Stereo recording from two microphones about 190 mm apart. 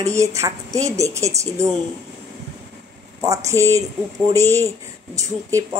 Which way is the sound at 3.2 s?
15° right (ahead or behind).